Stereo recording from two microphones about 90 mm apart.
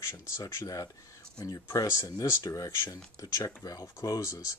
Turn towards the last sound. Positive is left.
turn(degrees=35)  # may be behind; listen again after turning